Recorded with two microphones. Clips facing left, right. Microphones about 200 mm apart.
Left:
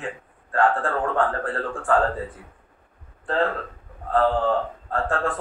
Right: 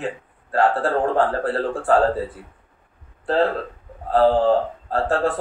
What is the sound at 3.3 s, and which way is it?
Speech, 35° right (ahead or behind).